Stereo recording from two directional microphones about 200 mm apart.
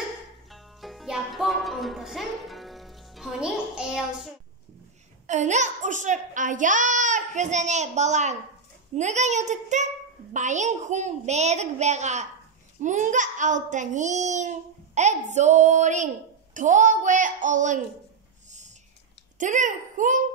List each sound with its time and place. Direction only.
0.5 s music: centre (ahead or behind)
5.2 s a child's voice: 35° right (ahead or behind)
19.3 s a woman's voice: 40° right (ahead or behind)